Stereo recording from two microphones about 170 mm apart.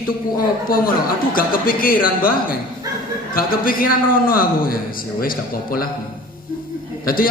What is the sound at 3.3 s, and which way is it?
A man's voice, 55° left (ahead or behind).